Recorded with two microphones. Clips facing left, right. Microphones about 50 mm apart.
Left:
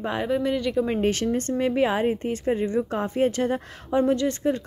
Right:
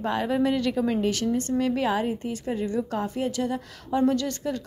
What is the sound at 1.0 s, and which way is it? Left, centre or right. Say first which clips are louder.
Speech: left 2 dB; left.